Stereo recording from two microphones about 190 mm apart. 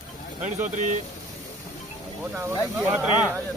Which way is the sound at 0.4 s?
40° right (ahead or behind).